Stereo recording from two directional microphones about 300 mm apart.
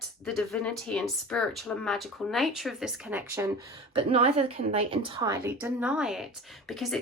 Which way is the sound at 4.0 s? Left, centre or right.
Centre.